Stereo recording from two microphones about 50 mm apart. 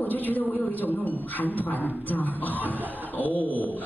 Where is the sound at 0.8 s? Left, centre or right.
Left.